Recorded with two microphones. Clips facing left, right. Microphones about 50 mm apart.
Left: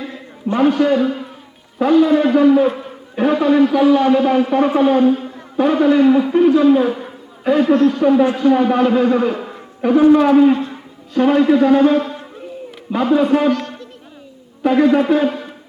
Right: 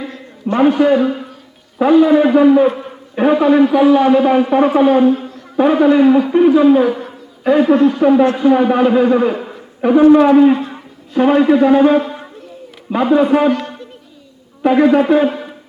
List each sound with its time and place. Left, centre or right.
0.5 s a man's voice: centre
6.8 s a sound: centre
7.5 s a man's voice: centre
14.6 s a man's voice: centre